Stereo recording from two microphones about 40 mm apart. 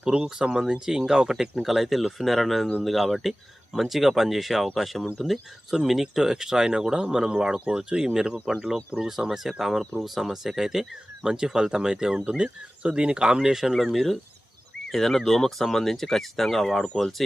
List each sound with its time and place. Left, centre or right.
0.0 s speech: right
9.3 s speech: centre
13.7 s speech: centre